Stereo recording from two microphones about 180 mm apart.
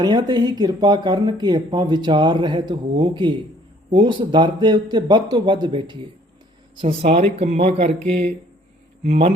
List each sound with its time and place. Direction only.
0.0 s speech: 20° right (ahead or behind)
9.0 s speech: 35° right (ahead or behind)